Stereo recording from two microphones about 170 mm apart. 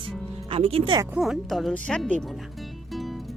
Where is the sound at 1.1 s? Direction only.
5° right (ahead or behind).